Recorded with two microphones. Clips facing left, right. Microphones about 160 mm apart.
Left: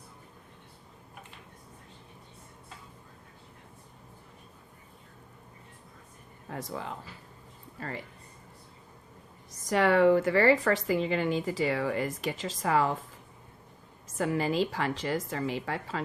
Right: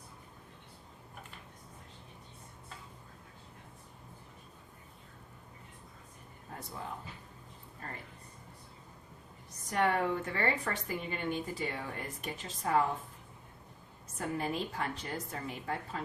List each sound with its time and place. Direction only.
6.5 s speech: 90° left
9.5 s a woman's voice: 90° left
14.2 s a woman's voice: 90° left